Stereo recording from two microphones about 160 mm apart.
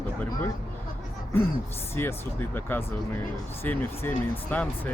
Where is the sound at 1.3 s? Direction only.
15° left (ahead or behind).